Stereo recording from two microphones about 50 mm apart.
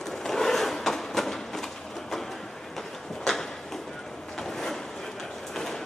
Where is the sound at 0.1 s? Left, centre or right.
Centre.